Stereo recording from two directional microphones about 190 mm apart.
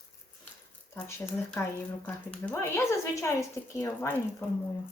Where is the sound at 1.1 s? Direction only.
15° left (ahead or behind).